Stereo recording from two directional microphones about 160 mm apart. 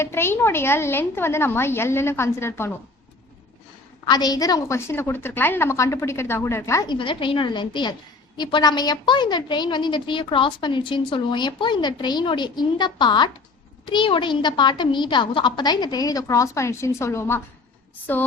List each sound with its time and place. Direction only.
0.0 s a woman's voice: 15° left (ahead or behind)
4.0 s a woman's voice: 25° left (ahead or behind)